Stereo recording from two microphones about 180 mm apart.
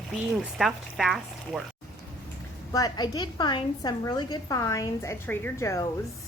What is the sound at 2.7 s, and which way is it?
A woman's voice, 20° left (ahead or behind).